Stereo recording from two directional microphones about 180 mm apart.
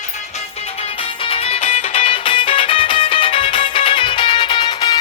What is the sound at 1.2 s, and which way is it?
Music, 30° left (ahead or behind).